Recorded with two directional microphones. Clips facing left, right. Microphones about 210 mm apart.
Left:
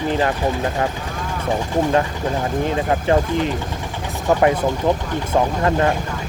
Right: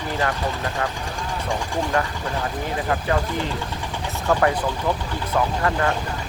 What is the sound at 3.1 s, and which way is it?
Speech, 20° left (ahead or behind).